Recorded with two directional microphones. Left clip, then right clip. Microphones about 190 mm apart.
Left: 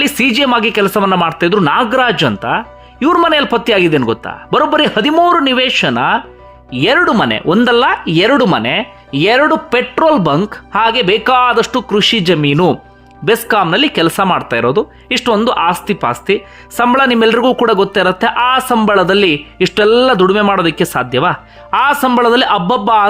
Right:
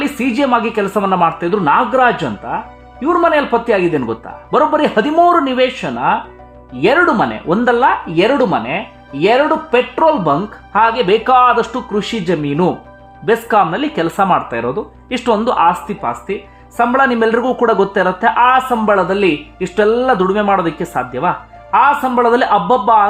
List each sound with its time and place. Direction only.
0.0 s speech: 20° left (ahead or behind)
10.3 s speech: 20° left (ahead or behind)
16.0 s speech: 25° left (ahead or behind)